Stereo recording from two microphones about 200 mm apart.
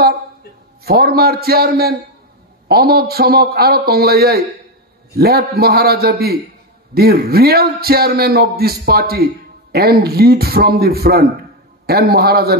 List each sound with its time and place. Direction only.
0.8 s a man's voice: 50° right (ahead or behind)